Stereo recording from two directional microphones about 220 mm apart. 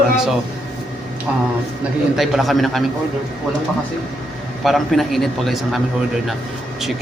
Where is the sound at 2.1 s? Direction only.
Centre (ahead or behind).